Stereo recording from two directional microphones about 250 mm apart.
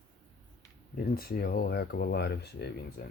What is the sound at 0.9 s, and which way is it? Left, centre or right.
Speech, left.